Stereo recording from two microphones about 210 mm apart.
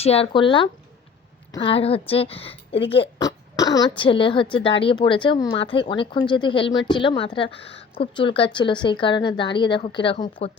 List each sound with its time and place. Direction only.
0.0 s a woman's voice: 30° left (ahead or behind)